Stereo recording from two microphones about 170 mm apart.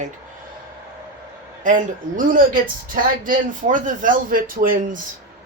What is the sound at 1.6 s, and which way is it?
A woman's voice, 50° right (ahead or behind).